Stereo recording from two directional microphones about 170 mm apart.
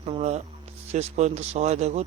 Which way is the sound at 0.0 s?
40° right (ahead or behind).